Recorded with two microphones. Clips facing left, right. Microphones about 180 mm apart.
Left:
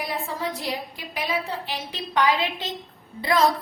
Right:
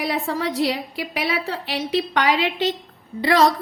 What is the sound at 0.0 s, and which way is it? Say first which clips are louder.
A woman's voice: right 5 dB; 75° right (ahead or behind).